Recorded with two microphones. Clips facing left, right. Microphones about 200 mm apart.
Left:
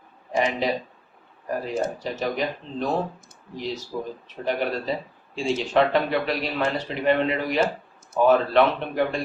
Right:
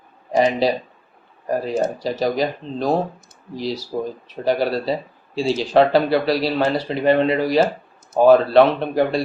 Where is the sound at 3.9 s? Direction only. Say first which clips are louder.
Right 6 dB; 40° right (ahead or behind).